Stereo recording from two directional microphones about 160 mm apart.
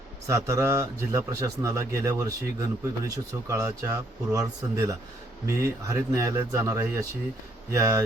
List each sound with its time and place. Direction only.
0.3 s a man's voice: 20° right (ahead or behind)